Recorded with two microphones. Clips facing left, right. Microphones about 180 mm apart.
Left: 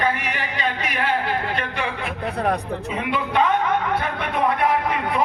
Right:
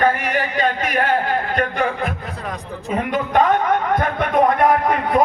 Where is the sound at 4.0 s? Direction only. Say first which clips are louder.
Right 6 dB; 45° right (ahead or behind).